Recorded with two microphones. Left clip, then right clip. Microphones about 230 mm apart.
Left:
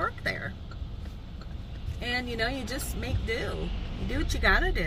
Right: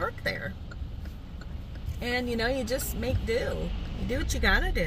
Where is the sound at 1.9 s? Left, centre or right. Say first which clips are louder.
Right 1 dB; centre.